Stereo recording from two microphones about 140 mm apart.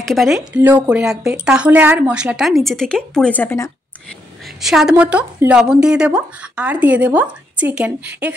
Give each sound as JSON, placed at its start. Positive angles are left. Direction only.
{"t": 0.0, "sound": "a woman's voice", "side_deg": 0}
{"t": 0.6, "sound": "a woman's voice", "side_deg": -15}
{"t": 4.6, "sound": "speech", "side_deg": 0}